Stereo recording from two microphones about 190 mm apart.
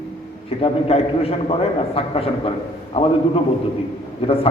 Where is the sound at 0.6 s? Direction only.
30° left (ahead or behind).